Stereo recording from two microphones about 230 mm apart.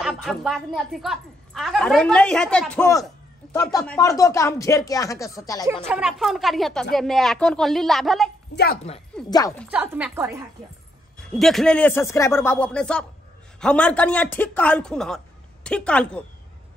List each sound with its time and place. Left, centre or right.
0.0 s a woman's voice: centre
5.9 s a man's voice: centre
9.3 s speech: centre
9.7 s a man's voice: centre